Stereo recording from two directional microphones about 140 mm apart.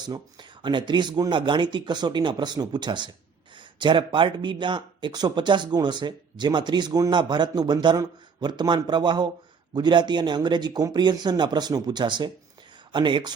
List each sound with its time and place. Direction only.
0.0 s speech: 30° right (ahead or behind)